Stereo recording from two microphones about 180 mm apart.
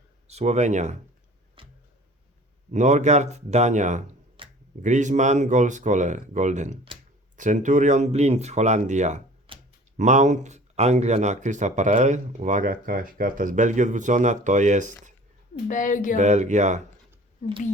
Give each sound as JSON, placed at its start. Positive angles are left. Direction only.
{"t": 0.3, "sound": "speech", "side_deg": -40}
{"t": 1.6, "sound": "a sound", "side_deg": -30}
{"t": 2.7, "sound": "speech", "side_deg": -40}
{"t": 4.4, "sound": "a sound", "side_deg": -30}
{"t": 4.8, "sound": "speech", "side_deg": -40}
{"t": 9.5, "sound": "a sound", "side_deg": -30}
{"t": 10.0, "sound": "speech", "side_deg": -40}
{"t": 15.6, "sound": "speech", "side_deg": 45}
{"t": 16.1, "sound": "speech", "side_deg": -40}